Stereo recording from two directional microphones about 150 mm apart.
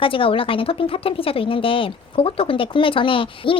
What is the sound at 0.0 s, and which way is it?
Speech, 35° left (ahead or behind).